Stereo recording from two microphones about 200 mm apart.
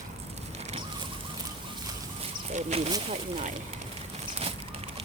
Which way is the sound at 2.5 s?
35° right (ahead or behind).